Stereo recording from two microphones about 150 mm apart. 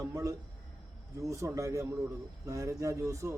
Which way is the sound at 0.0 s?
20° right (ahead or behind).